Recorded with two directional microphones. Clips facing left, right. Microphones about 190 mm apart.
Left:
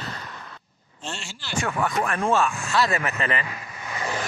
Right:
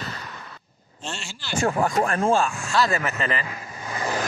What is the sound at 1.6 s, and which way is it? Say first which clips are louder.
Speech: right 4 dB; 35° right (ahead or behind).